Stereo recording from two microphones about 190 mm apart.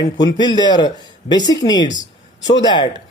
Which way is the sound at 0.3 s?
20° left (ahead or behind).